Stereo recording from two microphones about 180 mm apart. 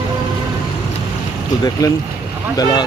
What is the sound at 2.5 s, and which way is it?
Speech, 25° left (ahead or behind).